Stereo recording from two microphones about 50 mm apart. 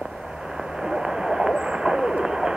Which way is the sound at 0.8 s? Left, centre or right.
Centre.